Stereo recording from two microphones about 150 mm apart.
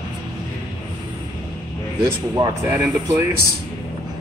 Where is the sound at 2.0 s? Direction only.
20° right (ahead or behind).